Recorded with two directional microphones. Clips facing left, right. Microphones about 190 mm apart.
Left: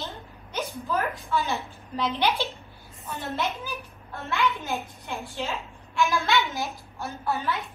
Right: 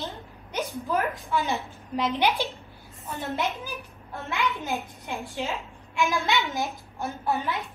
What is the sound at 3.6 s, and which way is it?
A child's voice, 15° right (ahead or behind).